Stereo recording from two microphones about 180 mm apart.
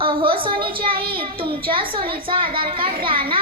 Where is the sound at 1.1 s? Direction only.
30° right (ahead or behind).